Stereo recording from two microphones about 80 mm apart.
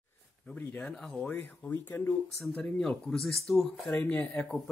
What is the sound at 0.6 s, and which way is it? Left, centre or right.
Speech, centre.